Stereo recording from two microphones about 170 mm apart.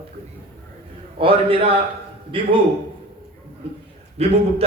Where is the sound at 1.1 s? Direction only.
35° right (ahead or behind).